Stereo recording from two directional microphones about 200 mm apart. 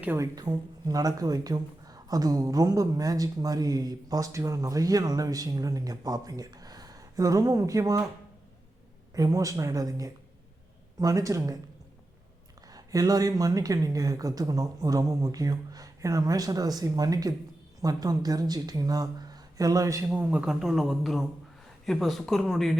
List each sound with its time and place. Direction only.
0.0 s speech: 15° right (ahead or behind)
9.1 s speech: 15° right (ahead or behind)
12.6 s a man's voice: 20° right (ahead or behind); by 22.7 s centre (ahead or behind)